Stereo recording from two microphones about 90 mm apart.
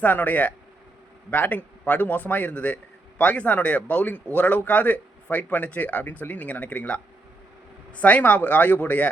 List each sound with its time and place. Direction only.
0.0 s a man's voice: 20° left (ahead or behind)